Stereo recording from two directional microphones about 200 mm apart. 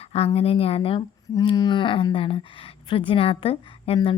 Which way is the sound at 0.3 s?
25° left (ahead or behind).